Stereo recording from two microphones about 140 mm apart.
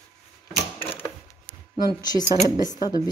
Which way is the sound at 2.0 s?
30° left (ahead or behind).